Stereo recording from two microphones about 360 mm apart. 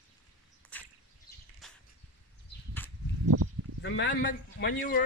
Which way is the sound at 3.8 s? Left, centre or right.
Left.